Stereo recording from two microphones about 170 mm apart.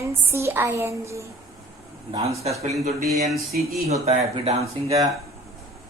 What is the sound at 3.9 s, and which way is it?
Speech, 40° right (ahead or behind).